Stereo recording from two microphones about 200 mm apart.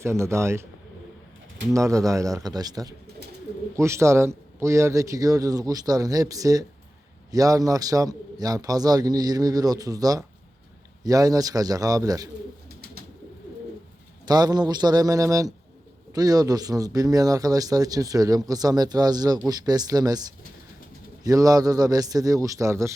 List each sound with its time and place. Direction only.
0.0 s a man's voice: 15° right (ahead or behind)
1.7 s a man's voice: 15° right (ahead or behind)
14.3 s a man's voice: 20° right (ahead or behind)
21.2 s a man's voice: 15° right (ahead or behind)